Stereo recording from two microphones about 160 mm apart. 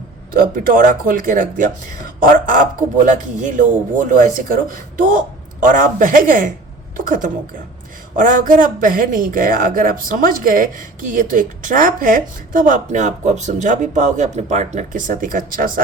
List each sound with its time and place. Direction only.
0.3 s speech: 60° right (ahead or behind)